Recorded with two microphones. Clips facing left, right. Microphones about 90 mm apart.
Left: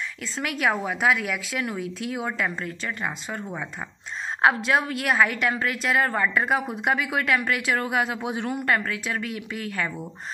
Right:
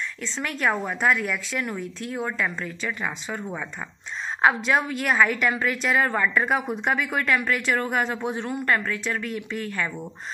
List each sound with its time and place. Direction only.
0.6 s speech: 5° left (ahead or behind)
1.8 s speech: 75° left (ahead or behind)
2.8 s speech: centre (ahead or behind)